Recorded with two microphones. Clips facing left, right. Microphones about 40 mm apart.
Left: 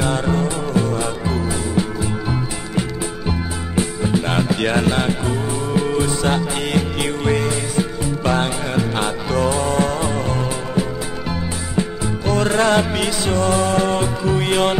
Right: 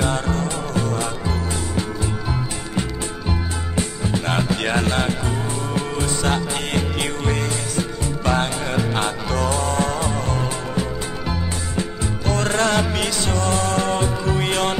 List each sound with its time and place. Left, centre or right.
0.2 s music: centre
3.7 s music: centre
12.3 s music: centre
12.9 s music: centre